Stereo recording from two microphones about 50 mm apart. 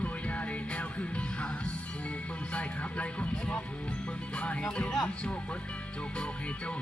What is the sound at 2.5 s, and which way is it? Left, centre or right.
Music, left.